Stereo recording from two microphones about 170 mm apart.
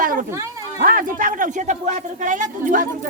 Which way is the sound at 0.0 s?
55° right (ahead or behind).